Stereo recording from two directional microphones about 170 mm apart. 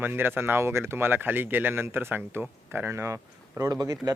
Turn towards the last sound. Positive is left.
turn(degrees=-20)  # may be behind; listen again after turning